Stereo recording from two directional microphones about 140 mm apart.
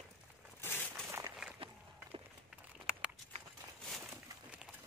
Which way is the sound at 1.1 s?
20° right (ahead or behind).